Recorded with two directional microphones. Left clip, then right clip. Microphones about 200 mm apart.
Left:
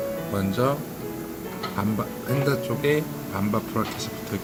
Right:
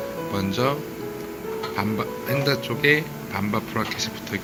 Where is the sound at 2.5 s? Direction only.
15° left (ahead or behind).